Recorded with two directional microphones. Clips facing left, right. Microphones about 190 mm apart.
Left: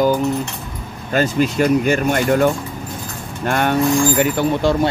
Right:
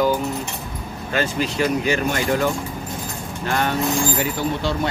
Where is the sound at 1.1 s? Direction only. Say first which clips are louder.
Left 6 dB; 45° left (ahead or behind); by 4.7 s 60° left (ahead or behind).